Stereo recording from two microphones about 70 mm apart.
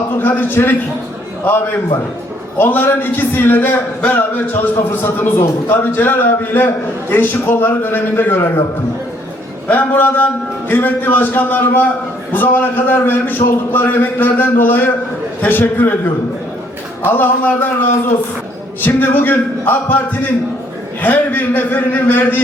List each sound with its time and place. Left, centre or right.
0.2 s a man's voice: left
9.6 s a man's voice: left
17.0 s a man's voice: left